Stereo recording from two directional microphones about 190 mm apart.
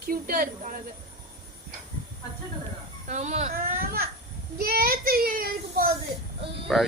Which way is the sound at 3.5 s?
50° right (ahead or behind).